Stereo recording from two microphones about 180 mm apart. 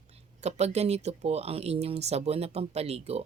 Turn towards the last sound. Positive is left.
turn(degrees=-35)  # may be behind; listen again after turning